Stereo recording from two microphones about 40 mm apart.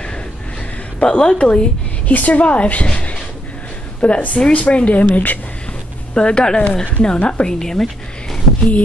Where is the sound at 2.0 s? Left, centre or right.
Left.